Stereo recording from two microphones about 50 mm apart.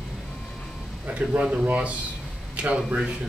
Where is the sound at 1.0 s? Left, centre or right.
Right.